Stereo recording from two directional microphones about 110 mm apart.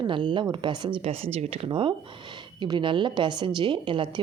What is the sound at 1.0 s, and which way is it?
A woman's voice, 65° right (ahead or behind).